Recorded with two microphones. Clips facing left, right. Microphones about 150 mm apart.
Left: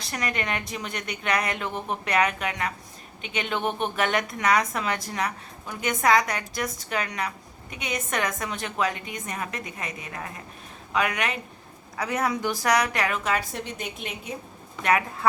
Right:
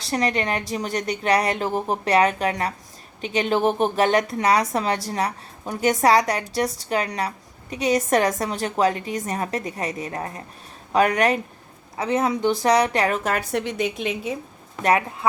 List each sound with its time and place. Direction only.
0.0 s a woman's voice: 30° right (ahead or behind)
11.9 s speech: 25° right (ahead or behind); by 13.4 s 45° right (ahead or behind)
13.5 s a woman's voice: 80° right
14.8 s a woman's voice: 35° right (ahead or behind)